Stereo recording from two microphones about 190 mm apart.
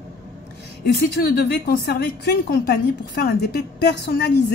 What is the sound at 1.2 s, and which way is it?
A woman's voice, 60° left (ahead or behind).